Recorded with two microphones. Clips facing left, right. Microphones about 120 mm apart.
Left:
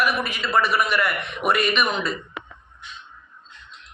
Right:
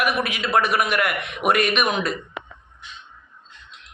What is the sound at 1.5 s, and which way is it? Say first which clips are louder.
Speech: right 2 dB; 50° right (ahead or behind).